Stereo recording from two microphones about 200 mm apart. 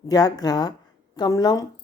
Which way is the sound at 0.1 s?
20° left (ahead or behind).